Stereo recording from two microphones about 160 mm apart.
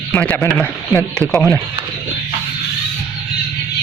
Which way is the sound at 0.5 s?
15° left (ahead or behind).